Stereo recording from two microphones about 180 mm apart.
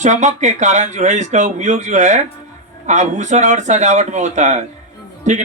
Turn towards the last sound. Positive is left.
turn(degrees=-40)  # may be behind; listen again after turning